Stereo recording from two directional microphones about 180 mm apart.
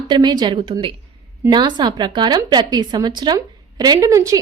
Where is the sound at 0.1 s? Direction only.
25° right (ahead or behind).